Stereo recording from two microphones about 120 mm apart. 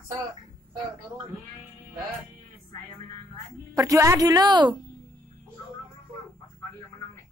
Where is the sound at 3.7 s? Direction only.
25° right (ahead or behind).